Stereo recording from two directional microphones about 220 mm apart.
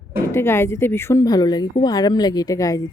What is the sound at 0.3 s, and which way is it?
A woman's voice, 10° left (ahead or behind).